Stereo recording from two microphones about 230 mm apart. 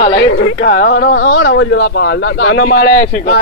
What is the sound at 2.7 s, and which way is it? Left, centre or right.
Speech, left.